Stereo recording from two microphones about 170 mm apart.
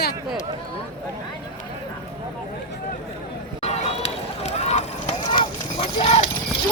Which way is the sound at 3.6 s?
40° left (ahead or behind).